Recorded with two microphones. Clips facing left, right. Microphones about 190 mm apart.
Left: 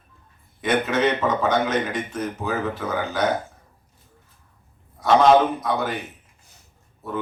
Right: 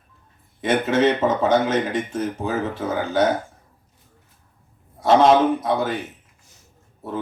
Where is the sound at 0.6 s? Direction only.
25° right (ahead or behind).